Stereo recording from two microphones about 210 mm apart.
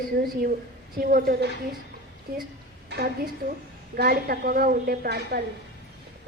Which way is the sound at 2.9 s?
50° right (ahead or behind).